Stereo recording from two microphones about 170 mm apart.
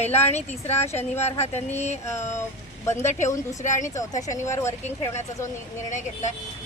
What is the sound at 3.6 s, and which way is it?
Speech, 45° left (ahead or behind).